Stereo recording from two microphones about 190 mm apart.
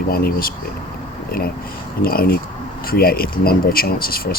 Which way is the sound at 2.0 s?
50° left (ahead or behind).